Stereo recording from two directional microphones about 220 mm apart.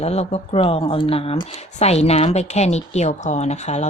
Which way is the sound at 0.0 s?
30° left (ahead or behind).